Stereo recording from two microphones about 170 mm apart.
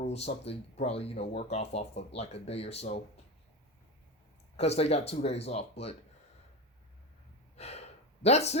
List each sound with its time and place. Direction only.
0.0 s speech: 40° left (ahead or behind)
4.5 s speech: 40° left (ahead or behind)
7.5 s gasp: 40° left (ahead or behind)